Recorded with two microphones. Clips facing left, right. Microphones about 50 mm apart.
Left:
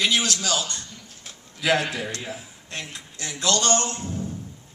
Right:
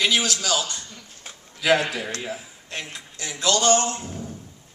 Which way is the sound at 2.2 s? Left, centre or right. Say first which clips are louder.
Right 3 dB; centre.